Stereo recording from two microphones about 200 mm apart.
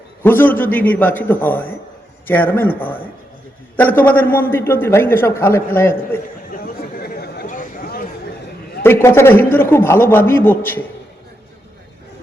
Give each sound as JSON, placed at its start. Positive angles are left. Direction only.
{"t": 0.2, "sound": "a man's voice", "side_deg": 10}
{"t": 6.5, "sound": "chatter", "side_deg": 50}
{"t": 8.8, "sound": "a man's voice", "side_deg": 10}